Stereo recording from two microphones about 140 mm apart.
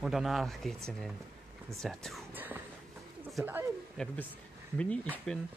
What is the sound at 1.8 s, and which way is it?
Speech, centre (ahead or behind).